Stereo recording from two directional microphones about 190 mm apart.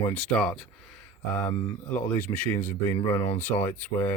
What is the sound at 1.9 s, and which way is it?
Speech, 10° left (ahead or behind).